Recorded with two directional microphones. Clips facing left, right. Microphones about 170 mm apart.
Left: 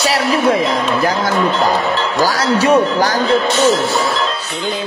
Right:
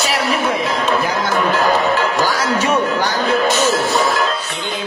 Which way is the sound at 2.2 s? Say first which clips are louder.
Left 3 dB; 35° left (ahead or behind).